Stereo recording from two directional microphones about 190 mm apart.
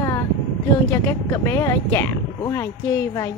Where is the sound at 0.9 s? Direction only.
15° left (ahead or behind).